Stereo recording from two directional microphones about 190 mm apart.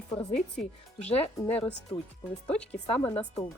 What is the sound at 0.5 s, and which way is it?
Speech, 5° left (ahead or behind).